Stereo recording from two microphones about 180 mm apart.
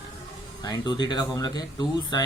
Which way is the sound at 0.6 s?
20° left (ahead or behind).